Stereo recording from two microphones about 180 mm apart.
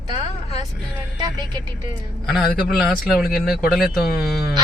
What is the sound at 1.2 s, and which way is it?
Speech, 25° right (ahead or behind).